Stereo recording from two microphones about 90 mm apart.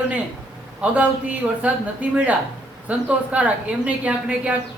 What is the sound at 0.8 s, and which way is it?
A man's voice, 15° right (ahead or behind).